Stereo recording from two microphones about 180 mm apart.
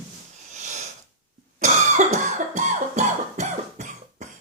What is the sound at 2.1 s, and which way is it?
Music, 45° right (ahead or behind).